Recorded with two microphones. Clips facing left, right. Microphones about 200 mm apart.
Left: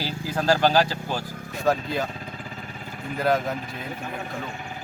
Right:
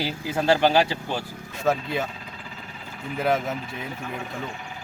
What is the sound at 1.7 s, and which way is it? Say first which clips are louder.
Speech: left 1 dB; centre (ahead or behind).